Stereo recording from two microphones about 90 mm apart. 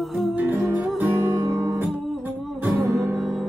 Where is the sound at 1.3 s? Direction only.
35° right (ahead or behind).